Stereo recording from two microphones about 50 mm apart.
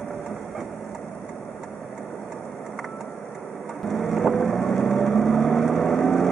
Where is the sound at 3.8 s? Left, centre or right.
Centre.